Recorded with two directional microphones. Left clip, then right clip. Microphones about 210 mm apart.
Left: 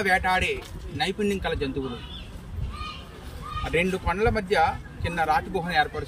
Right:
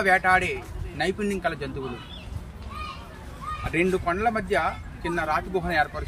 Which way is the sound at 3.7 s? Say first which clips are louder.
Right 1 dB; 5° right (ahead or behind).